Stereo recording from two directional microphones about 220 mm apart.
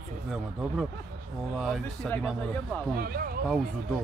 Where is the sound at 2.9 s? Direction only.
45° right (ahead or behind).